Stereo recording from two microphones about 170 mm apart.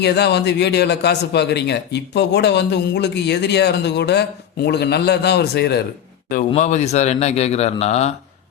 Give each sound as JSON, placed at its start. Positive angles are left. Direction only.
{"t": 0.0, "sound": "a man's voice", "side_deg": 80}
{"t": 6.5, "sound": "speech", "side_deg": 45}